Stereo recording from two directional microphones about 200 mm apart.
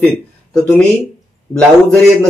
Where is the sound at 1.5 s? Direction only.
5° left (ahead or behind).